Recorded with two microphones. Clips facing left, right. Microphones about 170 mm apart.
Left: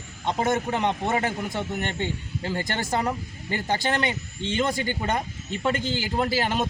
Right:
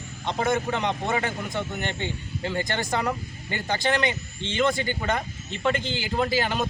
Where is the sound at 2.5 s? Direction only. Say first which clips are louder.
Right 1 dB; 30° left (ahead or behind).